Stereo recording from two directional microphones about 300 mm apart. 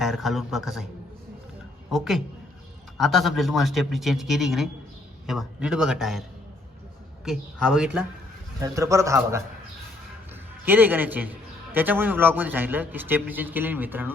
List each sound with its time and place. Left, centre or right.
0.0 s a man's voice: centre
1.9 s a man's voice: centre
7.3 s a man's voice: centre
10.7 s a man's voice: centre